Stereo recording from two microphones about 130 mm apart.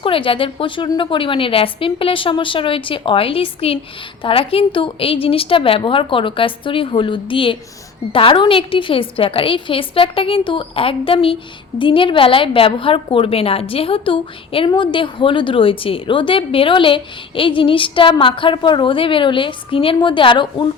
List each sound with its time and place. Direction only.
0.0 s a woman's voice: 45° left (ahead or behind)